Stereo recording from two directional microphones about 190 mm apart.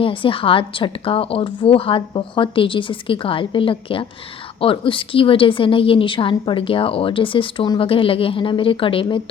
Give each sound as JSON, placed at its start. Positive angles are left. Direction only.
{"t": 0.0, "sound": "a woman's voice", "side_deg": 25}